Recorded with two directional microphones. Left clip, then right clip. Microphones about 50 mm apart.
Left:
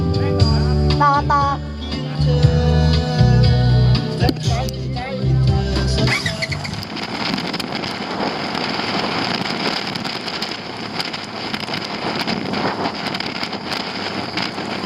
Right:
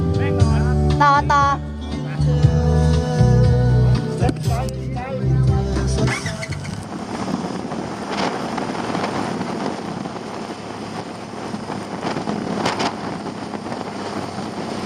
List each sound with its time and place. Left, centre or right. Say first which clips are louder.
0.9 s music: right 1 dB; right
2.3 s music: left 2 dB; left
5.7 s music: left 5 dB; left